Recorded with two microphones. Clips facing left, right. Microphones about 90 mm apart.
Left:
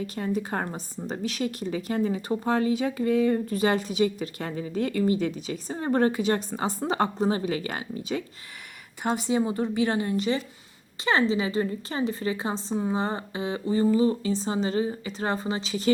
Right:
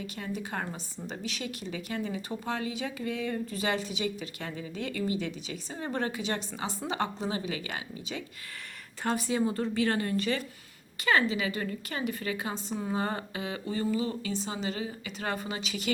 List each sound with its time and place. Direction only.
0.0 s a woman's voice: 40° left (ahead or behind)
9.0 s a woman's voice: 20° left (ahead or behind)